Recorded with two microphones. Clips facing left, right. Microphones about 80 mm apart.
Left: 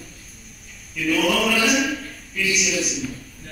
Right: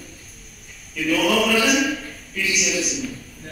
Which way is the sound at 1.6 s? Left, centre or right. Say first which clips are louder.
Right 1 dB; centre.